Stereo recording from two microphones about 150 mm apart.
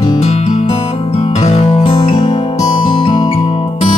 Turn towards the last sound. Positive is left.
turn(degrees=40)  # may be behind; listen again after turning